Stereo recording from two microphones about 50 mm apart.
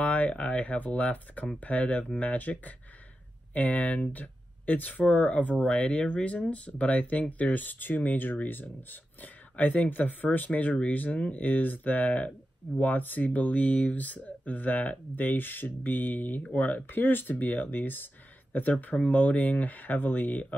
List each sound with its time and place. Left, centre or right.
0.0 s speech: left